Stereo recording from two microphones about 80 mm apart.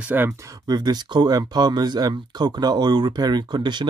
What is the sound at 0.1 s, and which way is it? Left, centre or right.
Speech, right.